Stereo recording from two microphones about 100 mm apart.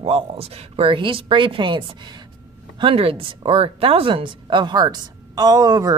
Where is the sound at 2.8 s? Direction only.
65° right (ahead or behind).